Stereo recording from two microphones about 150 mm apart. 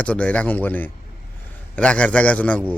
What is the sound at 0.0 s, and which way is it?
Speech, 10° left (ahead or behind).